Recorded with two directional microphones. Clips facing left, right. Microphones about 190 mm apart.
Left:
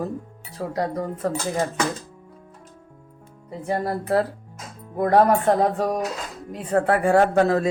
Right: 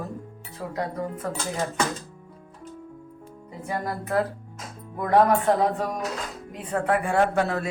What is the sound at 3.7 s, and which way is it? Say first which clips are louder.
Speech: left 5 dB; 30° left (ahead or behind).